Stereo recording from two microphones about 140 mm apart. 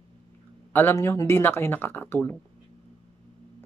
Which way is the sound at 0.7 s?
15° left (ahead or behind).